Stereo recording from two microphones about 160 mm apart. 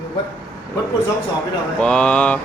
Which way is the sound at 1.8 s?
5° left (ahead or behind).